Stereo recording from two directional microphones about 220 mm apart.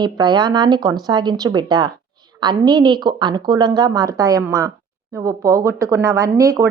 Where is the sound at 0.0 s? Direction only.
20° right (ahead or behind).